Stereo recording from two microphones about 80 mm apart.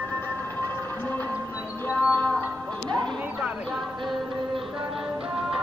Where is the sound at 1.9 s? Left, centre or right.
Left.